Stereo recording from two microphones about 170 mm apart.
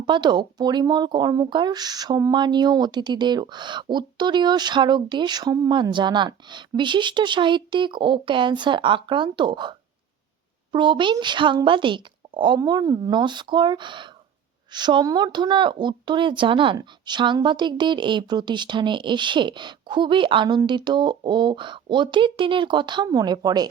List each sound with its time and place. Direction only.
0.0 s speech: 25° right (ahead or behind)